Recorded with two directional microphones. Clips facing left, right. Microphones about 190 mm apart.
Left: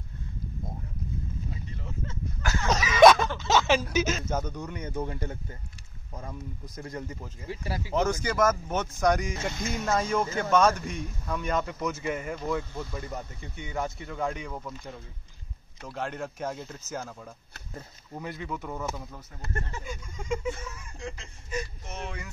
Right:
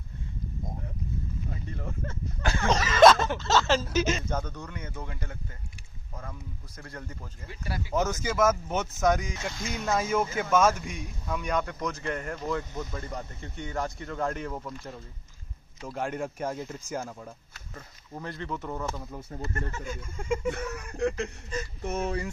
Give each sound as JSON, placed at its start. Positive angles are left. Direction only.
{"t": 1.5, "sound": "a sound", "side_deg": -55}
{"t": 2.4, "sound": "a sound", "side_deg": -30}
{"t": 2.7, "sound": "a sound", "side_deg": 10}
{"t": 3.3, "sound": "speech", "side_deg": 15}
{"t": 5.1, "sound": "speech", "side_deg": 35}
{"t": 6.8, "sound": "speech", "side_deg": 15}
{"t": 7.4, "sound": "speech", "side_deg": 35}
{"t": 7.9, "sound": "speech", "side_deg": 0}
{"t": 18.1, "sound": "speech", "side_deg": 5}
{"t": 20.4, "sound": "speech", "side_deg": -65}
{"t": 21.8, "sound": "speech", "side_deg": -45}